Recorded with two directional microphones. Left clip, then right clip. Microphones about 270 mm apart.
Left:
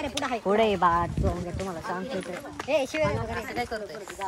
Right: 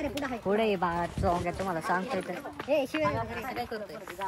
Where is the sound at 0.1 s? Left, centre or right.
Left.